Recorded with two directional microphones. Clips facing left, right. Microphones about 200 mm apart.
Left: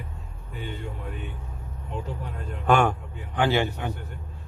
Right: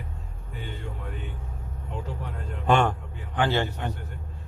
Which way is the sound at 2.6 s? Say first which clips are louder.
Left 1 dB; 5° left (ahead or behind).